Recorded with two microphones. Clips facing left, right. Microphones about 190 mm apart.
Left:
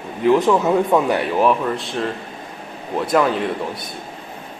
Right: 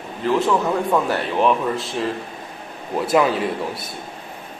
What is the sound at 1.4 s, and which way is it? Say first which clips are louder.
Speech: right 2 dB; centre (ahead or behind).